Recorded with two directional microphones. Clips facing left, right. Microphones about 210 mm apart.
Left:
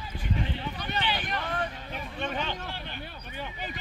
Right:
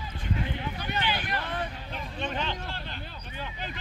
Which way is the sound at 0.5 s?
10° right (ahead or behind).